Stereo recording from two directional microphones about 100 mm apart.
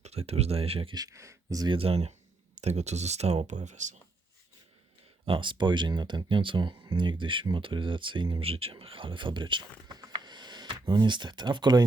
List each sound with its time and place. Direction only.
0.0 s speech: 90° right; by 0.9 s 70° right (ahead or behind)
0.9 s speech: 35° right (ahead or behind)
1.6 s speech: 65° right (ahead or behind); by 3.4 s 90° right
5.2 s speech: 60° right (ahead or behind)